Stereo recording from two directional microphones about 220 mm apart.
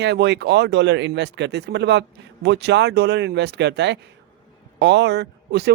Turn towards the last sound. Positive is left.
turn(degrees=-50)  # may be behind; listen again after turning